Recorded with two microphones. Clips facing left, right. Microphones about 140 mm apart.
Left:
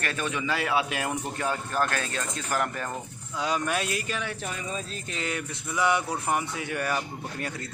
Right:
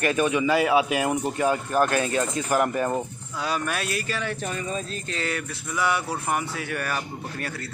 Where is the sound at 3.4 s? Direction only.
20° left (ahead or behind).